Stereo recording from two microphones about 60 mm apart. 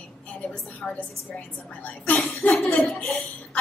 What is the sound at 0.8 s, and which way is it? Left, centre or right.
Speech, centre.